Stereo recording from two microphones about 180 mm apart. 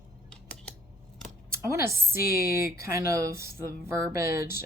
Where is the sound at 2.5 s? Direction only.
15° right (ahead or behind).